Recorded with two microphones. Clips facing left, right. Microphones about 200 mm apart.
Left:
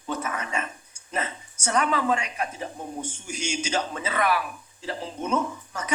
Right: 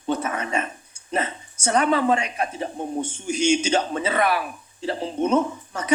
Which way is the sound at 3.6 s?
30° right (ahead or behind).